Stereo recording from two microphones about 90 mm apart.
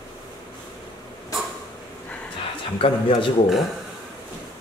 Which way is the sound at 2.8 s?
85° left.